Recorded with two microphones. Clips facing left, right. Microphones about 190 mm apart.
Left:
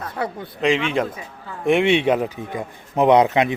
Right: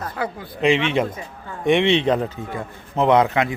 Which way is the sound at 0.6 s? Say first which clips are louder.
Right 1 dB; centre (ahead or behind).